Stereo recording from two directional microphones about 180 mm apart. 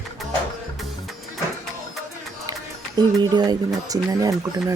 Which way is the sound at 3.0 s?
20° right (ahead or behind).